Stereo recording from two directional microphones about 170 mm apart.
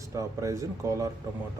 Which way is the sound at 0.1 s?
20° right (ahead or behind).